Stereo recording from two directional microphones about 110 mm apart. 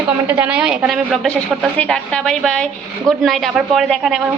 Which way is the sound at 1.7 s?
5° left (ahead or behind).